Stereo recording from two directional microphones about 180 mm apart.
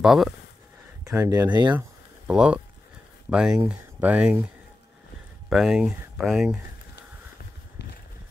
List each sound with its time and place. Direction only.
0.0 s speech: centre (ahead or behind)
1.0 s speech: 15° right (ahead or behind)
2.2 s speech: 5° right (ahead or behind)
5.5 s speech: 5° right (ahead or behind)